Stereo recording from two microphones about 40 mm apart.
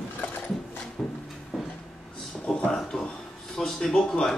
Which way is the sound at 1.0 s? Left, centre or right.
Centre.